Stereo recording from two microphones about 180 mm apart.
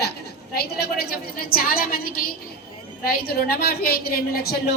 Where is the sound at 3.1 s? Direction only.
55° left (ahead or behind).